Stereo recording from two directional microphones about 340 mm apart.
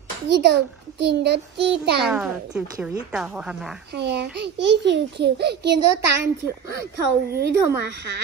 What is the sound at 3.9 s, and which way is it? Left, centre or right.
A child's voice, right.